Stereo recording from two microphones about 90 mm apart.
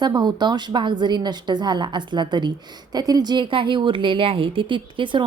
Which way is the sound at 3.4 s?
70° right (ahead or behind).